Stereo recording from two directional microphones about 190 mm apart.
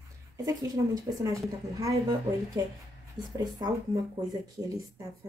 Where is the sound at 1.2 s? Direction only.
15° right (ahead or behind).